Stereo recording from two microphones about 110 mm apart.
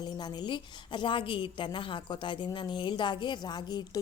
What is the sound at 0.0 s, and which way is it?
A woman's voice, 40° left (ahead or behind).